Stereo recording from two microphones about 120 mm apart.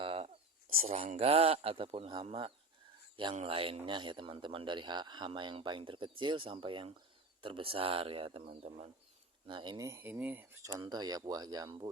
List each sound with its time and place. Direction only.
0.0 s a sound: 50° right (ahead or behind)
0.9 s speech: 60° right (ahead or behind)
9.5 s speech: 40° right (ahead or behind)